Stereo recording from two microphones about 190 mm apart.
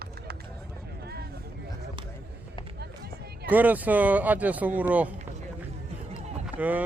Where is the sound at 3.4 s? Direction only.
10° right (ahead or behind).